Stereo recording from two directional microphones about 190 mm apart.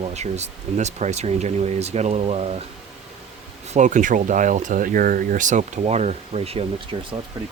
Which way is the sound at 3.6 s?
40° right (ahead or behind).